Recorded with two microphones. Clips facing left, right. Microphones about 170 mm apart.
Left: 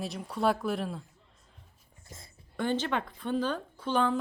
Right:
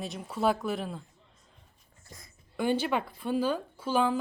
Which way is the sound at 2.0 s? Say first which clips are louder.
Left 1 dB; 25° left (ahead or behind).